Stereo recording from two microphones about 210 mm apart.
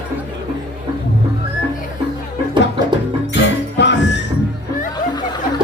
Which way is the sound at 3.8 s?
55° left (ahead or behind).